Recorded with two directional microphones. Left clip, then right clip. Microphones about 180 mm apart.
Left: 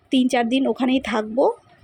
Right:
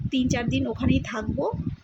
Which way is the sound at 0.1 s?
30° left (ahead or behind).